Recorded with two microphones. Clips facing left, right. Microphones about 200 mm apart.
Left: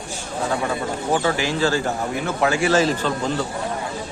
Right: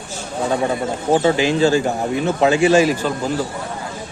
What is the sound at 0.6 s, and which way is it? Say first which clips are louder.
Speech: right 4 dB; 25° right (ahead or behind).